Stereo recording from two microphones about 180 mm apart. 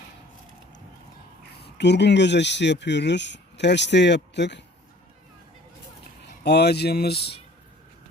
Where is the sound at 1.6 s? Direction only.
70° left (ahead or behind).